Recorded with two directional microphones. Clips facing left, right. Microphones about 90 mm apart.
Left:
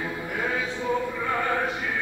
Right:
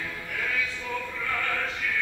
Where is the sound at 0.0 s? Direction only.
25° left (ahead or behind).